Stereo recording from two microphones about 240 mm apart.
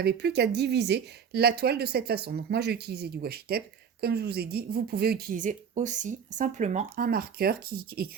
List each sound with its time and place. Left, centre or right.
0.0 s speech: right